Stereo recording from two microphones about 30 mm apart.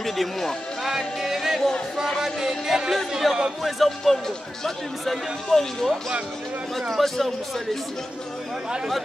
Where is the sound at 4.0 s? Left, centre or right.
Centre.